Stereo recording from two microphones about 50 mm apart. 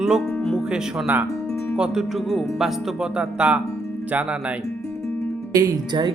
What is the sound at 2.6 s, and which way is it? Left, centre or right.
Speech, centre.